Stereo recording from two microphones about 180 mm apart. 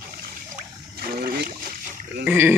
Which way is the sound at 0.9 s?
60° right (ahead or behind).